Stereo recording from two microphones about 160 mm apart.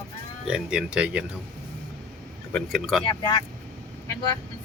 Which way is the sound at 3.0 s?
30° left (ahead or behind).